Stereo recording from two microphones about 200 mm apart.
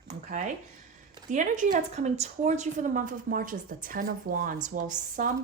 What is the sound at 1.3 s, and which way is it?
Speech, 40° right (ahead or behind).